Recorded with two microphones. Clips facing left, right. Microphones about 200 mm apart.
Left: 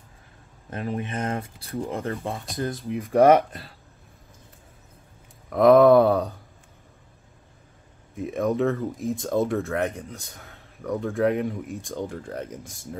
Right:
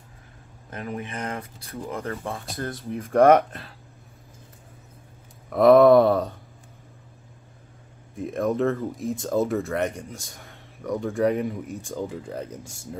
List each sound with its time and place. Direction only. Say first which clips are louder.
0.7 s speech: left 3 dB; 30° left (ahead or behind)
2.5 s speech: left 5 dB; 15° left (ahead or behind)
3.0 s speech: even; 5° left (ahead or behind)
5.5 s speech: right 1 dB; centre (ahead or behind)
8.2 s speech: even; centre (ahead or behind)